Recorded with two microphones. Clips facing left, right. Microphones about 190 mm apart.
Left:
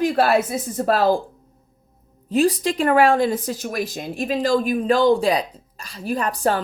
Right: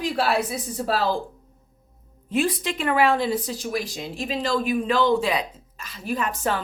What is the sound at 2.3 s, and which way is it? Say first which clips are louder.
Speech: left 5 dB; 40° left (ahead or behind).